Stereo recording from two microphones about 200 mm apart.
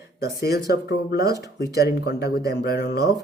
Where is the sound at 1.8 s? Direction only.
55° left (ahead or behind).